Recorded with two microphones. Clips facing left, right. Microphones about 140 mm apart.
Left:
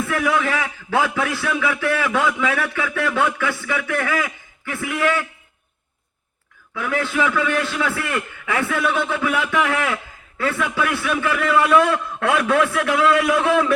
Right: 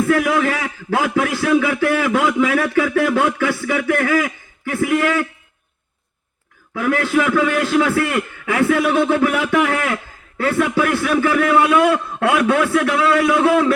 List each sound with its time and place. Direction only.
0.0 s a sound: 40° right (ahead or behind)
6.7 s a man's voice: 40° right (ahead or behind)
11.9 s a man's voice: 60° right (ahead or behind)
12.5 s a man's voice: 40° right (ahead or behind)